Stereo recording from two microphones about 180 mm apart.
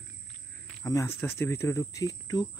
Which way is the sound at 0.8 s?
15° left (ahead or behind).